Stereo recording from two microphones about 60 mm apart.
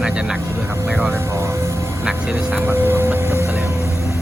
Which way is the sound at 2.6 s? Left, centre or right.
Right.